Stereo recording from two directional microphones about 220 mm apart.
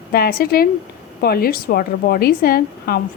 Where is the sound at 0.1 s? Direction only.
45° left (ahead or behind).